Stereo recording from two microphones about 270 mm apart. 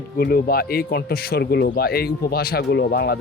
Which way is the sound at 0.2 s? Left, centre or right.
Left.